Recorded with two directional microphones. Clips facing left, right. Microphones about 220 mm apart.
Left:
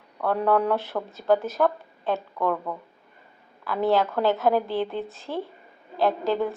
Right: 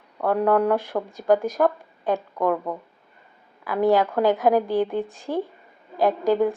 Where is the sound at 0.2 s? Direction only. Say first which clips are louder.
Right 3 dB; 15° right (ahead or behind).